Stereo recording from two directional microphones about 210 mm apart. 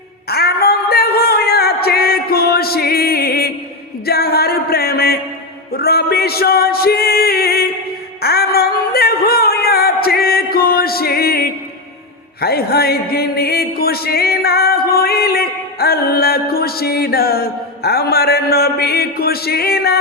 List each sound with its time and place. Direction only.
0.3 s a sound: 50° left (ahead or behind)
4.0 s music: 50° left (ahead or behind)
12.4 s speech: 50° left (ahead or behind)